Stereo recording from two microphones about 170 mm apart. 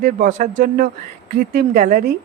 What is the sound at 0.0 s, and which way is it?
Speech, 50° right (ahead or behind).